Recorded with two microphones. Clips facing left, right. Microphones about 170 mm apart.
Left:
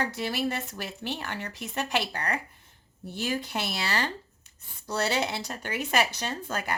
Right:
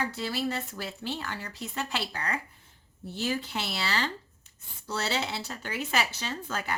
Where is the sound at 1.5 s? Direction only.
20° left (ahead or behind).